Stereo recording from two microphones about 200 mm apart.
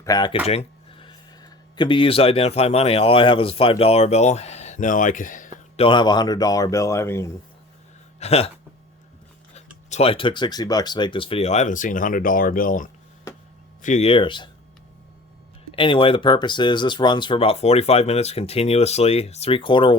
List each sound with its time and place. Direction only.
0.0 s speech: 20° left (ahead or behind); by 5.5 s 40° left (ahead or behind)
5.7 s speech: 25° left (ahead or behind)
8.2 s speech: 30° left (ahead or behind)
9.9 s speech: 30° left (ahead or behind)
15.7 s speech: 25° left (ahead or behind)